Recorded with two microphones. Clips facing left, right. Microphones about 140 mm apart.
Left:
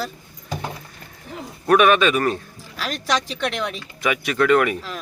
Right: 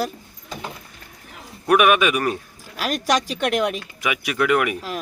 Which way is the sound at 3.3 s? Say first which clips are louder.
Right 4 dB; 45° right (ahead or behind).